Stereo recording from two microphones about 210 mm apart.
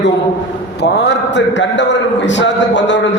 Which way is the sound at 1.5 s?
60° left (ahead or behind).